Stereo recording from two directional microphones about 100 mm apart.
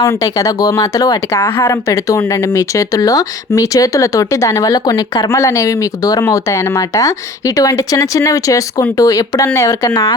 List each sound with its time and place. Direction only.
0.0 s speech: 35° left (ahead or behind)
1.4 s speech: 25° left (ahead or behind)